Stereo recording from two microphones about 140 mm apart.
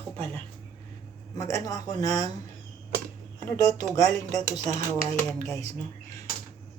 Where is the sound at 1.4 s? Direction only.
20° left (ahead or behind).